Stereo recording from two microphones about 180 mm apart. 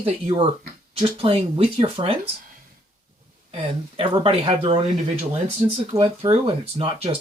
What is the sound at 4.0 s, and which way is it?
Speech, 30° right (ahead or behind).